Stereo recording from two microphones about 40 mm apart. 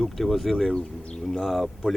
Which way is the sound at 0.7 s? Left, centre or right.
Centre.